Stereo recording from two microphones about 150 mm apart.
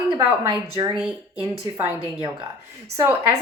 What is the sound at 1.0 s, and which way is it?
A woman's voice, 5° right (ahead or behind).